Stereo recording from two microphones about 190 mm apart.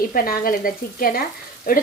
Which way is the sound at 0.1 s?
50° left (ahead or behind).